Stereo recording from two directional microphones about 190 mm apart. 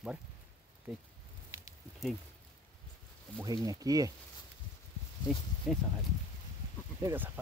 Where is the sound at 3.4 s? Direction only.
20° right (ahead or behind).